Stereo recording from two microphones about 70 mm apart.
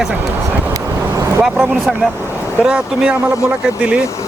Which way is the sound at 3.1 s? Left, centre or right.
Right.